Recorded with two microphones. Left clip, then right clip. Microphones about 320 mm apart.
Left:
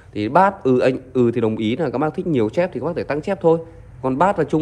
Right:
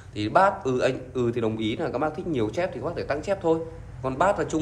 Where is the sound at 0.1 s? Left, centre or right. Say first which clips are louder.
Left 5 dB; left.